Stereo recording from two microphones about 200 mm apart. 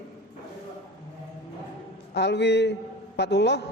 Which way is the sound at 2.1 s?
60° left (ahead or behind).